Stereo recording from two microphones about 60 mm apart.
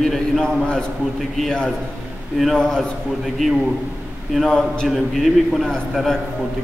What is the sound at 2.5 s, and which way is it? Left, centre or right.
Speech, centre.